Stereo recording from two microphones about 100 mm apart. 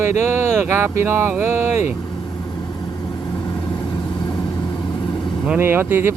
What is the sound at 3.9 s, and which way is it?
Vehicle, 45° left (ahead or behind).